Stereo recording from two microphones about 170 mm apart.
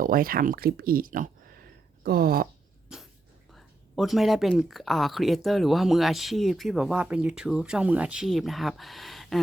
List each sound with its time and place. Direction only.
0.0 s speech: 55° right (ahead or behind)
3.5 s speech: centre (ahead or behind)